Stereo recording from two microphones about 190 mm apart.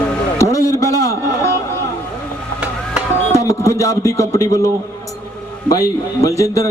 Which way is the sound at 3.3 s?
15° left (ahead or behind).